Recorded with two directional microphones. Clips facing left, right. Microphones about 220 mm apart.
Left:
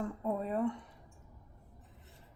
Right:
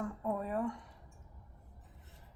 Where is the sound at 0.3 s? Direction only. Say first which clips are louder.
Left 3 dB; 25° left (ahead or behind).